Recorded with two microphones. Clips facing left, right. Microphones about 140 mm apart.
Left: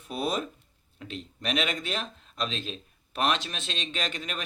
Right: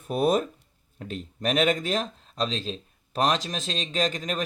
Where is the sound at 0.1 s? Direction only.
45° right (ahead or behind).